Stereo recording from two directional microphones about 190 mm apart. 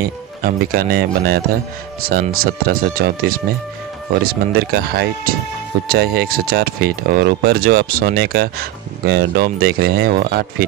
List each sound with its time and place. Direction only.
0.0 s speech: 50° right (ahead or behind)